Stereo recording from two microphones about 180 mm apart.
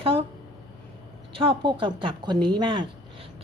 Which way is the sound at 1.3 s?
30° right (ahead or behind).